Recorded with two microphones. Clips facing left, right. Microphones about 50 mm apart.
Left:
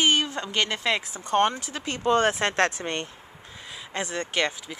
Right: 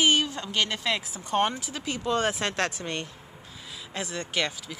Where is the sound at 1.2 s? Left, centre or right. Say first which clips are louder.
Left 3 dB; centre.